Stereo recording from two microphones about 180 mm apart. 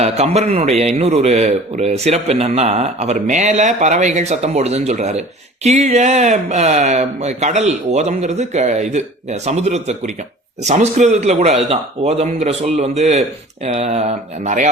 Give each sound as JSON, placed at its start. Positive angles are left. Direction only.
{"t": 0.0, "sound": "a man's voice", "side_deg": -35}